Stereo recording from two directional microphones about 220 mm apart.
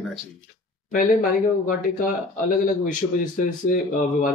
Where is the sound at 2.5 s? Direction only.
35° left (ahead or behind).